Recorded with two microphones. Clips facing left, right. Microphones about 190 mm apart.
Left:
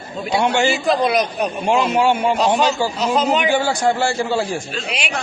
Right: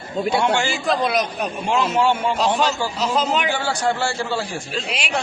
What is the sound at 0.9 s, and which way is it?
Speech, centre (ahead or behind).